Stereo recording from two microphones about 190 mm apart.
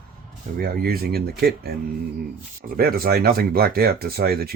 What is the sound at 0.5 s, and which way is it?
Speech, 55° right (ahead or behind).